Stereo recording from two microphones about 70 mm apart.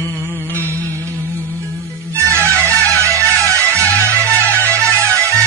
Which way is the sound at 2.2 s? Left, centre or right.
Left.